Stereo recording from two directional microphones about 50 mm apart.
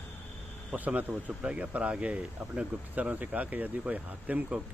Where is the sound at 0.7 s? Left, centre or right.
Right.